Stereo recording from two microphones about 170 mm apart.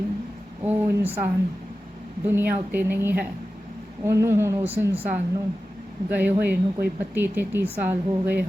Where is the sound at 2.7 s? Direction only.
10° right (ahead or behind).